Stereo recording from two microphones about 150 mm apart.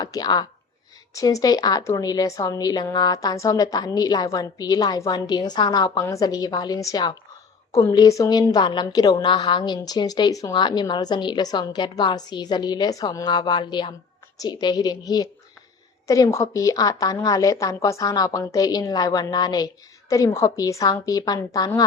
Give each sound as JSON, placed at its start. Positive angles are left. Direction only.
{"t": 0.0, "sound": "a woman's voice", "side_deg": 25}